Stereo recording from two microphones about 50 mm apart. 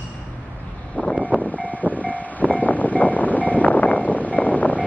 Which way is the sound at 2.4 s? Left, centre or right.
Left.